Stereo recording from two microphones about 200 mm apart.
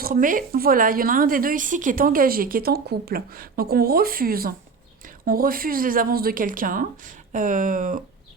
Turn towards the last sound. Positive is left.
turn(degrees=-40)  # may be behind; listen again after turning